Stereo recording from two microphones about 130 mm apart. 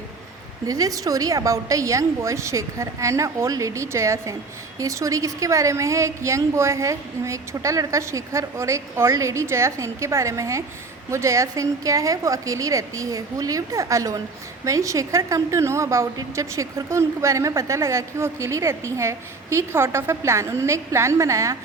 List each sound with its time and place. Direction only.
0.7 s a woman's voice: 25° right (ahead or behind)